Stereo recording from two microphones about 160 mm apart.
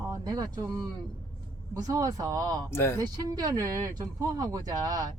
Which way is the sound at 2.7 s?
15° left (ahead or behind).